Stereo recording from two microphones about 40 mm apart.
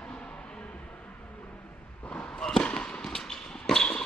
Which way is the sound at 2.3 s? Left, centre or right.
Left.